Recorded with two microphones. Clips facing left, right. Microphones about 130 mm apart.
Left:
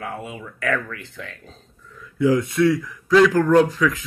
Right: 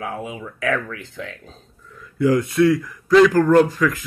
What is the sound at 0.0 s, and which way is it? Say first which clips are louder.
Speech: right 3 dB; 15° right (ahead or behind).